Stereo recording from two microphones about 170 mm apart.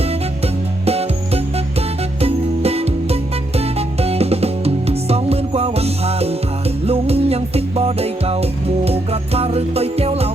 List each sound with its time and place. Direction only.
0.0 s music: 35° right (ahead or behind)